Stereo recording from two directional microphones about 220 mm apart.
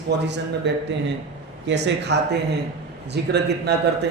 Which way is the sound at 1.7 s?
50° right (ahead or behind).